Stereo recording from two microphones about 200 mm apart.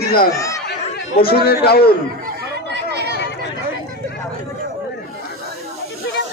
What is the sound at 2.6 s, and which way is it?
Chatter, 55° right (ahead or behind).